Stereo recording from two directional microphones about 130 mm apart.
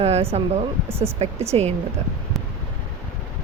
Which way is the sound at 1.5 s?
45° right (ahead or behind).